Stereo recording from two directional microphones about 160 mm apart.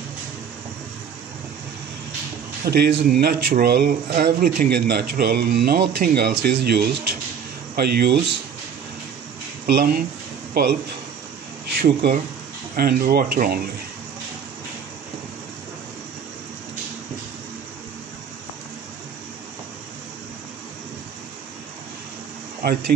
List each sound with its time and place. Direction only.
2.6 s speech: 75° right (ahead or behind)
9.7 s speech: 75° right (ahead or behind)
11.8 s speech: 70° right (ahead or behind)
22.6 s speech: 80° right